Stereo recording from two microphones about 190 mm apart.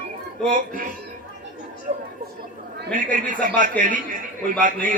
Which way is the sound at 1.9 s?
40° right (ahead or behind).